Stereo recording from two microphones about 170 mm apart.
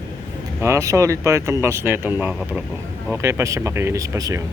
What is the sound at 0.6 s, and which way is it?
Speech, 15° right (ahead or behind).